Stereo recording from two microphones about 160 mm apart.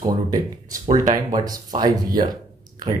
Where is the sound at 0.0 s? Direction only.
25° right (ahead or behind).